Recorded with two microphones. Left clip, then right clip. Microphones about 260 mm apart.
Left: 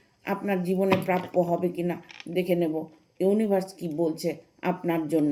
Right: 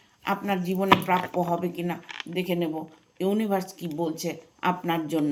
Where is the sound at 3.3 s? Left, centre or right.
Centre.